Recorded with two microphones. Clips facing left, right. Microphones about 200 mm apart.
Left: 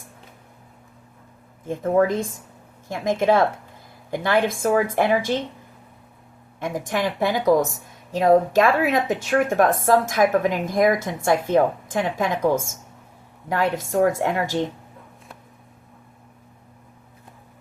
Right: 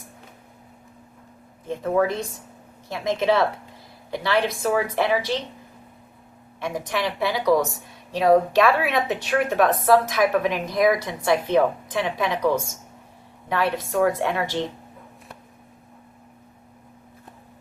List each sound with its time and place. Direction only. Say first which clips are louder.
1.7 s a woman's voice: left 3 dB; 50° left (ahead or behind)
6.7 s a woman's voice: left 2 dB; 50° left (ahead or behind)